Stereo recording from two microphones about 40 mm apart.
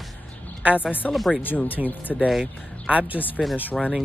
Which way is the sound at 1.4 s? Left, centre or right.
Left.